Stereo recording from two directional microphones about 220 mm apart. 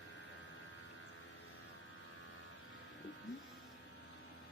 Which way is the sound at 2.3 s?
60° left (ahead or behind).